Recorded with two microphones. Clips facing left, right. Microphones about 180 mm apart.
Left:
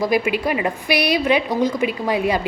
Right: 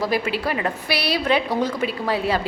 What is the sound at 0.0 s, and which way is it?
A woman's voice, 15° left (ahead or behind).